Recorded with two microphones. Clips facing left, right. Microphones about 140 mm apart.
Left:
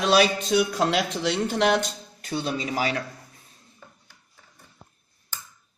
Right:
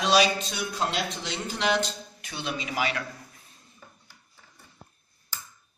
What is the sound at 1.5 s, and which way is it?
Speech, 55° left (ahead or behind).